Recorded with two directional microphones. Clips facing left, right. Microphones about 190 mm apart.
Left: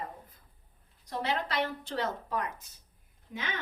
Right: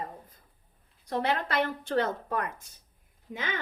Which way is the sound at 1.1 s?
55° right (ahead or behind).